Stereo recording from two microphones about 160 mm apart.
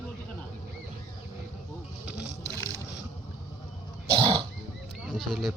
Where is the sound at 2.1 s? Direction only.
10° right (ahead or behind).